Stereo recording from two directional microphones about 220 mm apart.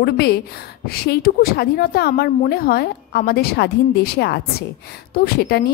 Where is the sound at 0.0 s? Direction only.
45° left (ahead or behind).